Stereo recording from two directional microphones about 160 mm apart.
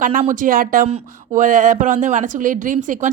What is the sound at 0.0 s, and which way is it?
Speech, 55° right (ahead or behind).